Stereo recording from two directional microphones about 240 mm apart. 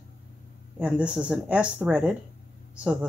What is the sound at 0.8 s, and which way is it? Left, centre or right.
Speech, centre.